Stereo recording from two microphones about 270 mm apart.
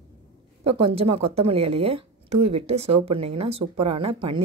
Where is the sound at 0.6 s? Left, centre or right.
Centre.